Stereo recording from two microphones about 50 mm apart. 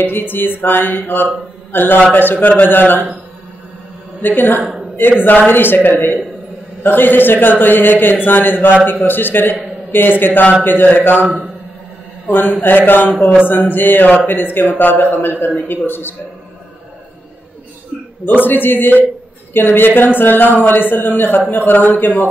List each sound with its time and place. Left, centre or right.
0.0 s speech: left
4.2 s speech: left
11.2 s a man's voice: centre
12.3 s speech: left
18.4 s speech: left